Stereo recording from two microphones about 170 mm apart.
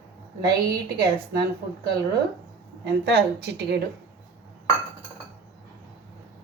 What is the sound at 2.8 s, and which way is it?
Speech, 85° right.